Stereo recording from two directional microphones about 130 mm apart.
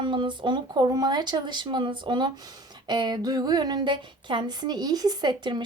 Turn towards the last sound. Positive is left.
turn(degrees=-35)  # may be behind; listen again after turning